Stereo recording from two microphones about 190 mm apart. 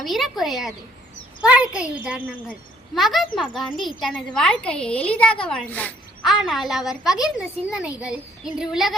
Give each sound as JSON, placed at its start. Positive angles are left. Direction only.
{"t": 0.0, "sound": "speech", "side_deg": 0}